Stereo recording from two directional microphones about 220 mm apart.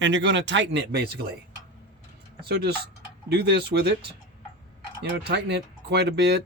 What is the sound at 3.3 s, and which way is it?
Speech, 50° right (ahead or behind).